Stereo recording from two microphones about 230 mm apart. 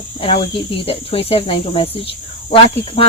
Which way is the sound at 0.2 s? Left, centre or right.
Left.